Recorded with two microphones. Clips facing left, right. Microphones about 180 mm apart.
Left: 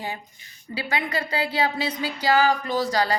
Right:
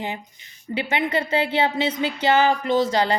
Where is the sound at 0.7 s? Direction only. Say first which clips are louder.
Right 4 dB; 20° right (ahead or behind).